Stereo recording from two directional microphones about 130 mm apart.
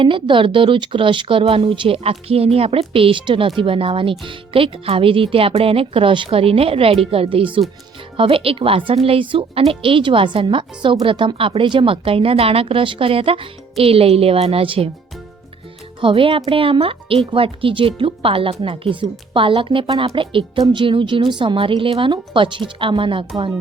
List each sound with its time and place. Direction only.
0.0 s speech: 40° right (ahead or behind)
16.0 s speech: 40° right (ahead or behind)